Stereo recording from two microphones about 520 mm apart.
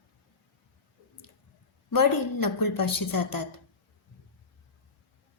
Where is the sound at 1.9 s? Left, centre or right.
Left.